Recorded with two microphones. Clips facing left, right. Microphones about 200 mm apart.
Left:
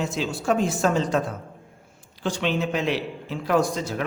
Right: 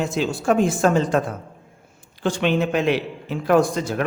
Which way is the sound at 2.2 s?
55° right (ahead or behind).